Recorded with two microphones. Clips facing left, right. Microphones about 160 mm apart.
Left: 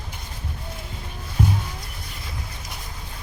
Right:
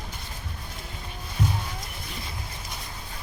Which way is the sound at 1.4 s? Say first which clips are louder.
Left 5 dB; 60° left (ahead or behind).